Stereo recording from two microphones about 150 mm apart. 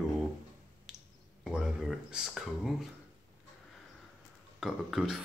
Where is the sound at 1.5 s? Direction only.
5° right (ahead or behind).